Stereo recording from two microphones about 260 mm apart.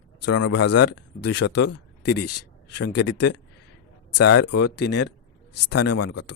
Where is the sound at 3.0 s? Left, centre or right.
Left.